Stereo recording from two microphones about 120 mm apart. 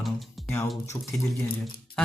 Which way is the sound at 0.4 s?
20° left (ahead or behind).